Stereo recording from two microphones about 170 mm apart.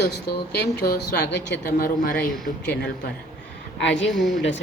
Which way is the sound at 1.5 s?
65° left (ahead or behind).